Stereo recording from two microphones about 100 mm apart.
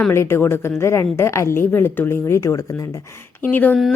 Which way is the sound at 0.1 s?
25° left (ahead or behind).